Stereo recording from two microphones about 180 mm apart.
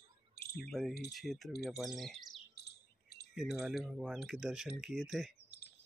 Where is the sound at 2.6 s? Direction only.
60° left (ahead or behind).